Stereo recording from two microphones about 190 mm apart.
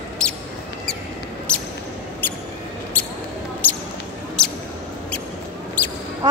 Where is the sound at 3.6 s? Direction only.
10° left (ahead or behind).